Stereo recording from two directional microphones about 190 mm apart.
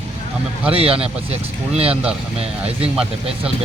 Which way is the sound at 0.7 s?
30° right (ahead or behind).